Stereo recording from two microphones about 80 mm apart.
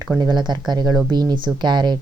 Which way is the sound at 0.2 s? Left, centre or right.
Right.